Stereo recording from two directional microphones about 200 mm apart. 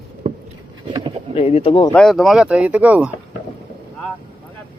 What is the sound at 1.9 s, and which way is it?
Speech, centre (ahead or behind).